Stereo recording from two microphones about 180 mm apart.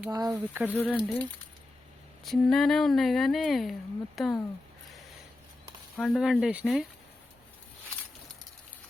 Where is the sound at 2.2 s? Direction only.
Centre (ahead or behind).